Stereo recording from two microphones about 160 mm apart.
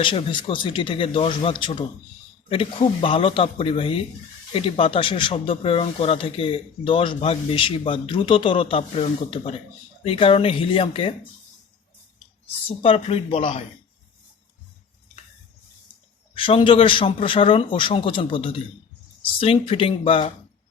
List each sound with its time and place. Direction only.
0.0 s speech: 35° left (ahead or behind)
12.6 s speech: 35° left (ahead or behind)
16.3 s speech: 35° left (ahead or behind)